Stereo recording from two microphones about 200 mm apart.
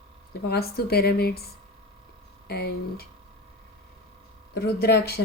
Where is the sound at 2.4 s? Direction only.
50° left (ahead or behind).